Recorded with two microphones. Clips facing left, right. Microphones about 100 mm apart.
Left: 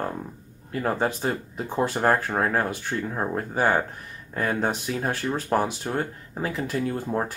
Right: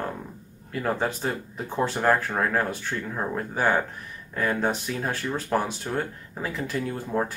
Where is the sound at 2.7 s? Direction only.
15° left (ahead or behind).